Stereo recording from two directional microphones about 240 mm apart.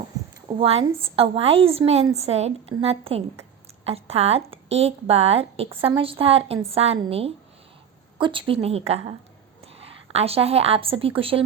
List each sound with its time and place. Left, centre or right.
0.4 s a woman's voice: right